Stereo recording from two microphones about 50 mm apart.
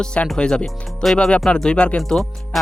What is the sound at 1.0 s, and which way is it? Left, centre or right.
Speech, centre.